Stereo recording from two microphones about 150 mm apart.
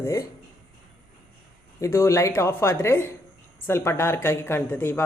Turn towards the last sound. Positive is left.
turn(degrees=15)  # may be behind; listen again after turning